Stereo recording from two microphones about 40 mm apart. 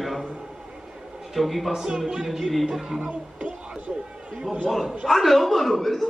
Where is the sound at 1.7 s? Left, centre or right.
Centre.